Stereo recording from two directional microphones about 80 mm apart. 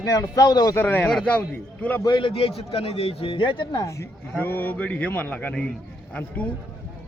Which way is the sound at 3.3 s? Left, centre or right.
Left.